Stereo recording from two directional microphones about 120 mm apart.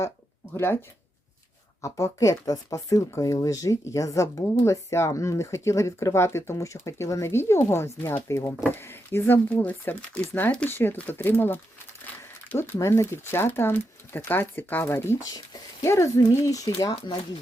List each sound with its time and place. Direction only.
0.5 s speech: 20° left (ahead or behind)
1.8 s speech: 25° left (ahead or behind)